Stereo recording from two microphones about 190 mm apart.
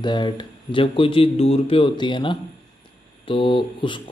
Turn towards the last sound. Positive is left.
turn(degrees=25)  # may be behind; listen again after turning